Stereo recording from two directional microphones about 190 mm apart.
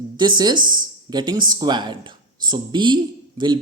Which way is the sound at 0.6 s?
45° right (ahead or behind).